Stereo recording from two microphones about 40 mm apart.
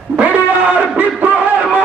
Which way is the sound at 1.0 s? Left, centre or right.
Right.